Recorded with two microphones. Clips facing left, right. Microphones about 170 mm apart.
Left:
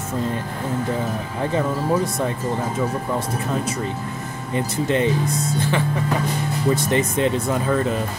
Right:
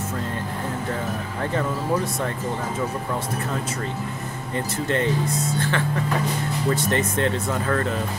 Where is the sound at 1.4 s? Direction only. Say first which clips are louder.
Left 4 dB; 15° left (ahead or behind).